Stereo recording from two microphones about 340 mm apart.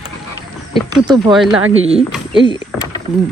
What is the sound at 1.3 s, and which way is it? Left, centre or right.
Speech, centre.